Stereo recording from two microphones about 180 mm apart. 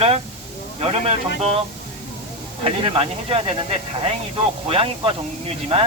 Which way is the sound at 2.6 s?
30° right (ahead or behind).